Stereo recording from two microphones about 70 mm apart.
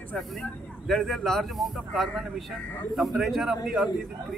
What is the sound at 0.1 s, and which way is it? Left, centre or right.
A man's voice, centre.